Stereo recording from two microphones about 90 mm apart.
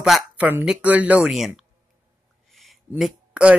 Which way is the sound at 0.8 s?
15° right (ahead or behind).